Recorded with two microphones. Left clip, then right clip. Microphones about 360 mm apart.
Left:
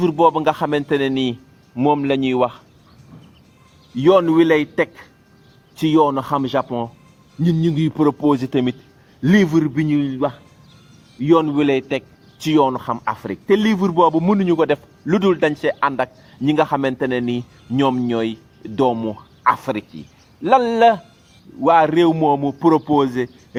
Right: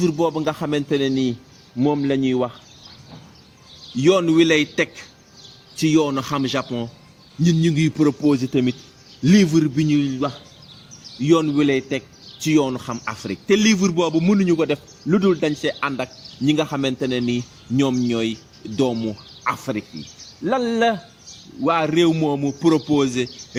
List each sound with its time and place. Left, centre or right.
0.0 s a man's voice: left
4.0 s a man's voice: left
19.4 s a man's voice: left